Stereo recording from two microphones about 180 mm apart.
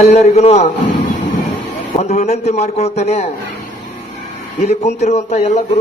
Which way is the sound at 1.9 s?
40° left (ahead or behind).